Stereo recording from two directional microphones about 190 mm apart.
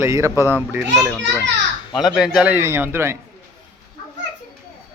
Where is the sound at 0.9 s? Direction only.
Centre (ahead or behind).